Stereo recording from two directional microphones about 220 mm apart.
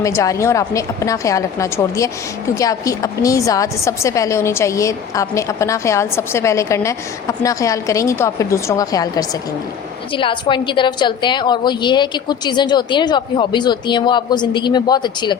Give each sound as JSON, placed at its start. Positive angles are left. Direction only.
{"t": 0.0, "sound": "a woman's voice", "side_deg": 15}